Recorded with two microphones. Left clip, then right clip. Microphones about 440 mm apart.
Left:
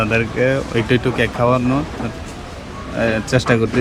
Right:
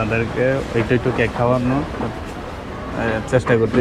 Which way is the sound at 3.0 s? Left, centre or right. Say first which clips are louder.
Left 2 dB; left.